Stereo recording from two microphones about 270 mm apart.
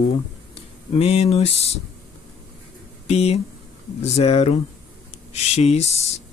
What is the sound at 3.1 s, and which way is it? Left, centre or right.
Speech, left.